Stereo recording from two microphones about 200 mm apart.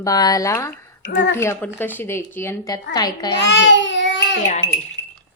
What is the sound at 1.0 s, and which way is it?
Speech, 60° left (ahead or behind).